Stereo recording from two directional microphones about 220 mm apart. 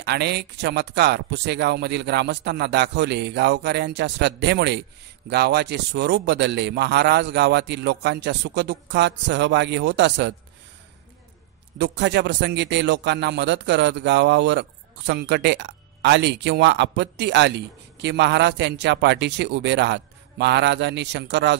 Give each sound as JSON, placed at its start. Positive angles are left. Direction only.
{"t": 0.0, "sound": "a man's voice", "side_deg": -50}
{"t": 11.8, "sound": "a man's voice", "side_deg": -50}